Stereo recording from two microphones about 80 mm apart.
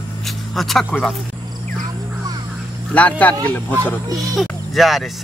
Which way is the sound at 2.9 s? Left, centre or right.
Centre.